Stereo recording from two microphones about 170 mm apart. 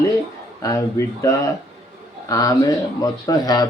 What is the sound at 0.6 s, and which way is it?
Speech, 20° left (ahead or behind).